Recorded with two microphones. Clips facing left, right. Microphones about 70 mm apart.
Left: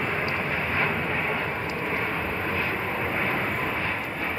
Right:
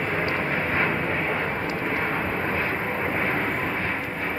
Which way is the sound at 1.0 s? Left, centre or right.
Centre.